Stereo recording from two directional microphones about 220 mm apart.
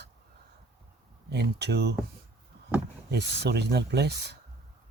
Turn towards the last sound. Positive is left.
turn(degrees=-50)  # may be behind; listen again after turning